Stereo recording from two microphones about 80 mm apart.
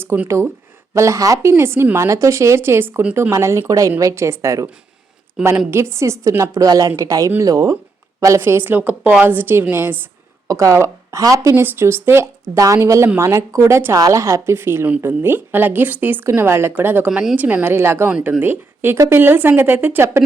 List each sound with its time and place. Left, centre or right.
0.1 s a woman's voice: right
5.4 s a woman's voice: centre
5.7 s a woman's voice: right
8.4 s a woman's voice: right
10.5 s a woman's voice: right
11.5 s a woman's voice: right
12.5 s a woman's voice: right
18.9 s speech: right
19.2 s a woman's voice: right